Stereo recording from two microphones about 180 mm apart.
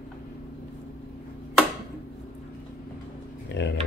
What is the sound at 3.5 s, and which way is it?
Speech, 70° left (ahead or behind).